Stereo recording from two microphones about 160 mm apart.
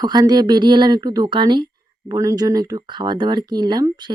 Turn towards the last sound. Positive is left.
turn(degrees=-25)  # may be behind; listen again after turning